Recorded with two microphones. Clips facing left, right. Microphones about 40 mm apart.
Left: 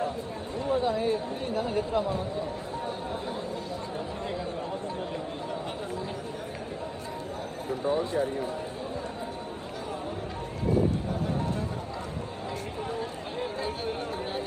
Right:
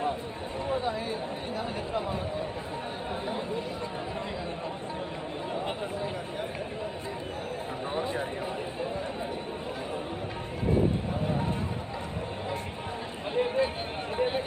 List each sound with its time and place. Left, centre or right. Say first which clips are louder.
13.3 s speech: right 8 dB; right